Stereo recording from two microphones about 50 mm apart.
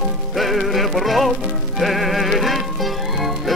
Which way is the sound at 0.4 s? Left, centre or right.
Centre.